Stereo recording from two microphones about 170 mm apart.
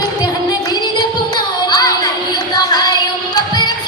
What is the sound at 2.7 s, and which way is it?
Child singing, 25° left (ahead or behind).